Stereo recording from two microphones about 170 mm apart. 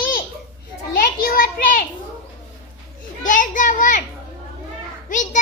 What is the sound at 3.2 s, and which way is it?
Speech, 50° left (ahead or behind).